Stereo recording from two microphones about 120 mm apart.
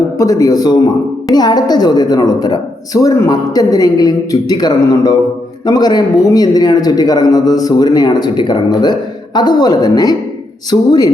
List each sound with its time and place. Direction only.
0.2 s a man's voice: 30° left (ahead or behind)